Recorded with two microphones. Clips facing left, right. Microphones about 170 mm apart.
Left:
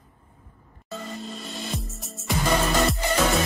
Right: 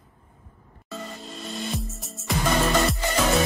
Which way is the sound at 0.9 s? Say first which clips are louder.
Left 2 dB; centre (ahead or behind).